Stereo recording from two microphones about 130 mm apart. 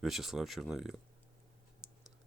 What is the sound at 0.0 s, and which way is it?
Speech, centre (ahead or behind).